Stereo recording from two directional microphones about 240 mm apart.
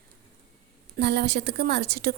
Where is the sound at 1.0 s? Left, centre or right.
Right.